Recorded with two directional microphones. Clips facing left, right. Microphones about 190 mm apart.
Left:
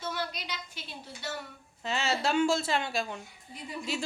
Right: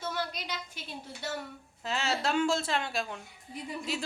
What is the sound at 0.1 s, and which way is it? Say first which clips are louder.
Speech: even; 50° right (ahead or behind).